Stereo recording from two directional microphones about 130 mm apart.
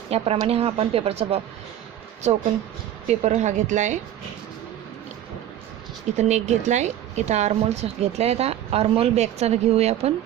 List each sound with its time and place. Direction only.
0.1 s speech: 50° right (ahead or behind)
3.1 s a woman's voice: 60° right (ahead or behind)
6.1 s a woman's voice: 65° right (ahead or behind)